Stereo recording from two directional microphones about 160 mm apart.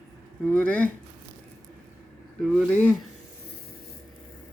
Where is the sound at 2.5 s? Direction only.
Centre (ahead or behind).